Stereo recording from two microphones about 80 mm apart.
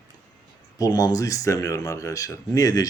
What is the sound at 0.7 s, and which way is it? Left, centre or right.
Speech, left.